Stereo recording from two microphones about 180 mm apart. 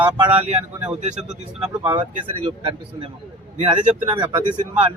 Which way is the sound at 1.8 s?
30° right (ahead or behind).